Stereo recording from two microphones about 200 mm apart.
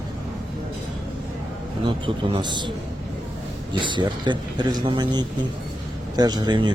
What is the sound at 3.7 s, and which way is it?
Speech, 25° right (ahead or behind).